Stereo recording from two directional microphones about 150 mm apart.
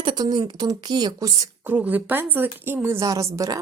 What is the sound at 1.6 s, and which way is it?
A woman's voice, 10° right (ahead or behind).